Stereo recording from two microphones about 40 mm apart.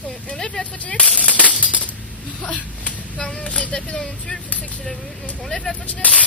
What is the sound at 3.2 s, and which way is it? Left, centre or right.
Speech, left.